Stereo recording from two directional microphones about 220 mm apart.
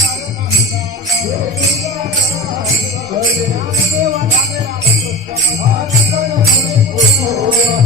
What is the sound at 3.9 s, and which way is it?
Music, 30° right (ahead or behind).